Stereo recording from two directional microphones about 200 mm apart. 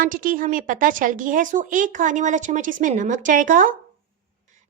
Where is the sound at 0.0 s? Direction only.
45° right (ahead or behind).